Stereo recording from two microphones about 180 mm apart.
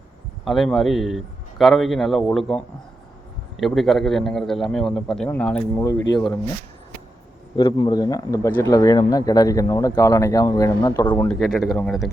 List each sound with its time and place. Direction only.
0.4 s a man's voice: centre (ahead or behind)
3.6 s a man's voice: centre (ahead or behind)
7.5 s speech: 25° left (ahead or behind)
11.3 s a man's voice: centre (ahead or behind)